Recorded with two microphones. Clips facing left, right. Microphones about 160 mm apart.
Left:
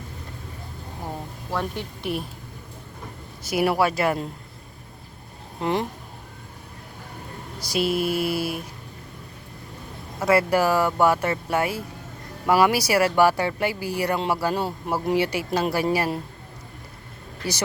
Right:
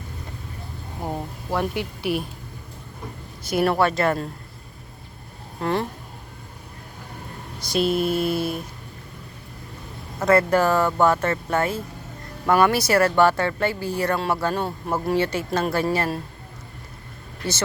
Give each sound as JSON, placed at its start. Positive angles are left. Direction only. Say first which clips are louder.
{"t": 1.5, "sound": "speech", "louder": "right 3 dB", "side_deg": -10}
{"t": 3.5, "sound": "speech", "louder": "right 1 dB", "side_deg": 10}
{"t": 5.5, "sound": "speech", "louder": "even", "side_deg": 15}
{"t": 7.7, "sound": "speech", "louder": "right 2 dB", "side_deg": 5}
{"t": 10.2, "sound": "speech", "louder": "right 2 dB", "side_deg": 10}
{"t": 17.4, "sound": "speech", "louder": "right 1 dB", "side_deg": 10}